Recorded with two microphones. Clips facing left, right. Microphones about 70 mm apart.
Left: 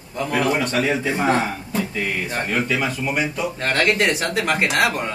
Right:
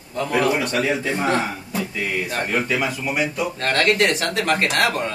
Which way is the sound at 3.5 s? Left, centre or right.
Centre.